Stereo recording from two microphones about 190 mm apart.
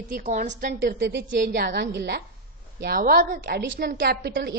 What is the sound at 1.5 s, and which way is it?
A woman's voice, 50° right (ahead or behind).